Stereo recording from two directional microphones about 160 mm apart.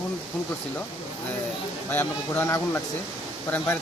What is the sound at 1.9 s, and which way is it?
Speech, 15° left (ahead or behind).